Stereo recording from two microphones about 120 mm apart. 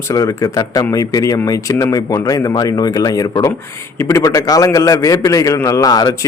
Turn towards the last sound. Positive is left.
turn(degrees=30)  # may be behind; listen again after turning